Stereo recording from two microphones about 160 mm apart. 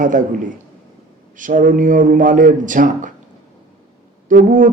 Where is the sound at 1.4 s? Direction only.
55° right (ahead or behind).